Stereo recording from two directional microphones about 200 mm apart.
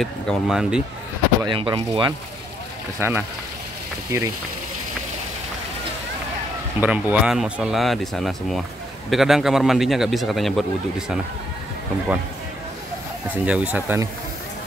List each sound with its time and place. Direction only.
0.0 s a man's voice: centre (ahead or behind)
1.4 s speech: 25° right (ahead or behind)
3.0 s speech: 10° right (ahead or behind)
6.8 s a man's voice: 5° right (ahead or behind)
13.3 s speech: 5° right (ahead or behind)